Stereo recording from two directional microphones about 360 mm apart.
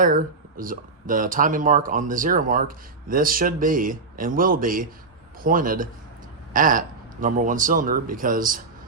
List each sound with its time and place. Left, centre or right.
0.0 s speech: right